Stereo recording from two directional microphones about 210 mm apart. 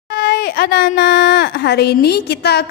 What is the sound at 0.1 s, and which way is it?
Speech, 50° left (ahead or behind).